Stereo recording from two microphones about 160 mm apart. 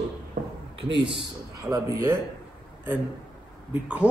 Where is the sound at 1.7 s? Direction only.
20° right (ahead or behind).